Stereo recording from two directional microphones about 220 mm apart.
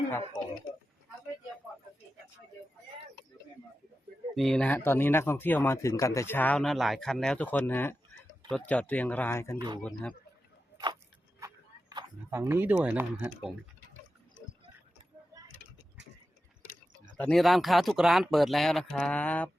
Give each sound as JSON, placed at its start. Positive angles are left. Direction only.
{"t": 4.4, "sound": "speech", "side_deg": 0}
{"t": 9.6, "sound": "speech", "side_deg": -20}
{"t": 9.8, "sound": "speech", "side_deg": 5}
{"t": 11.3, "sound": "a sound", "side_deg": -15}
{"t": 17.2, "sound": "speech", "side_deg": 5}